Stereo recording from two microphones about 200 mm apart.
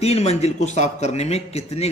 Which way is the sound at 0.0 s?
30° left (ahead or behind).